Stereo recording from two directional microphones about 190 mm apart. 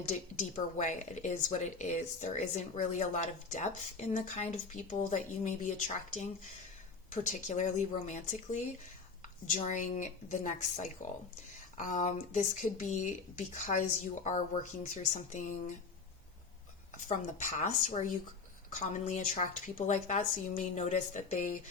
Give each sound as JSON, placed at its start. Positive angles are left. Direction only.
{"t": 0.3, "sound": "speech", "side_deg": 40}
{"t": 7.1, "sound": "speech", "side_deg": 40}
{"t": 17.1, "sound": "speech", "side_deg": 40}